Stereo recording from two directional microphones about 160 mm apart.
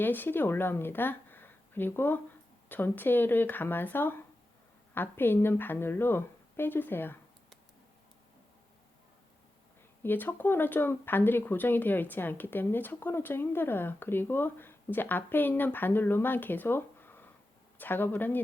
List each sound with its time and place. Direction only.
0.0 s speech: 10° left (ahead or behind)
10.0 s speech: 15° left (ahead or behind)